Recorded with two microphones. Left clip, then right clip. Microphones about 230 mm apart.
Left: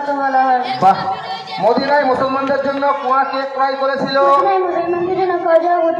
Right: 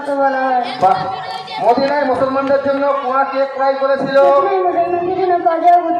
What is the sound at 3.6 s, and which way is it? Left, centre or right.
Speech, left.